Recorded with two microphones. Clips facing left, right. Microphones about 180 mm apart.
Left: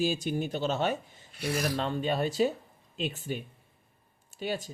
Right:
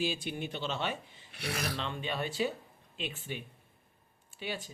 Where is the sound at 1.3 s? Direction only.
65° right (ahead or behind).